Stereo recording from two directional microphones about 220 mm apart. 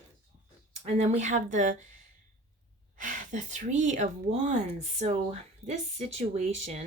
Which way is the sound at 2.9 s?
35° right (ahead or behind).